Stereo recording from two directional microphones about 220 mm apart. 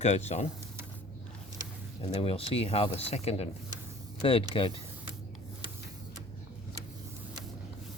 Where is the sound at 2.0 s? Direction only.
25° left (ahead or behind).